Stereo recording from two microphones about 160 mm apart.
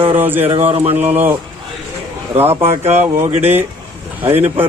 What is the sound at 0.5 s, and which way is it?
Speech, 40° right (ahead or behind).